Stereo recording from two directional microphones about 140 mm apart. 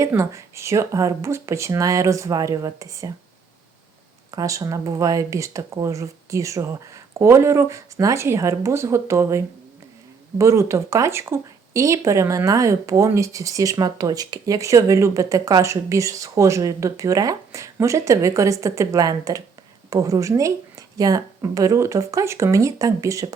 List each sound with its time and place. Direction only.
0.0 s speech: 20° right (ahead or behind)
4.3 s speech: 25° right (ahead or behind)